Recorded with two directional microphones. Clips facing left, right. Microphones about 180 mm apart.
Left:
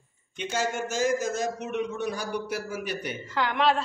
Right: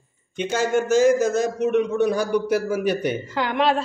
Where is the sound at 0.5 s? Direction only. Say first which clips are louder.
Right 9 dB; 55° right (ahead or behind).